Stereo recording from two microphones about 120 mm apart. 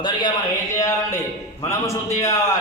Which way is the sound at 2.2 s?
25° left (ahead or behind).